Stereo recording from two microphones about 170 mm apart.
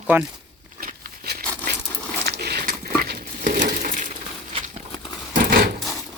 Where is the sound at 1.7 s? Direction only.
75° right (ahead or behind); by 4.0 s 50° right (ahead or behind).